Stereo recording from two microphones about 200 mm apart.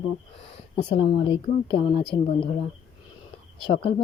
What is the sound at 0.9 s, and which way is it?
Speech, 25° left (ahead or behind).